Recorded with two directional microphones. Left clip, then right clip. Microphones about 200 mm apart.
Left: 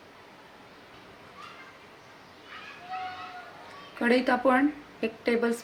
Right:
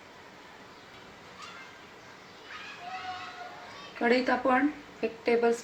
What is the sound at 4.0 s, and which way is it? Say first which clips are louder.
A woman's voice: left 2 dB; 20° left (ahead or behind).